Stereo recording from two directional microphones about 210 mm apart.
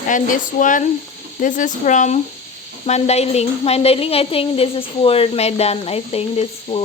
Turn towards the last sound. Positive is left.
turn(degrees=30)  # may be behind; listen again after turning